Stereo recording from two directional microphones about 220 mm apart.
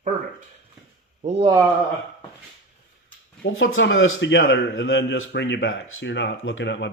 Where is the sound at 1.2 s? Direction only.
25° right (ahead or behind).